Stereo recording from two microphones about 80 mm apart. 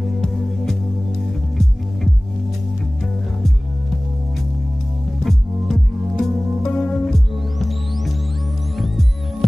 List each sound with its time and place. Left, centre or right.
5.2 s music: centre